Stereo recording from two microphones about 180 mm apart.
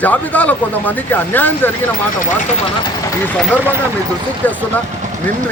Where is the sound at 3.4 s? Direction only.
5° right (ahead or behind).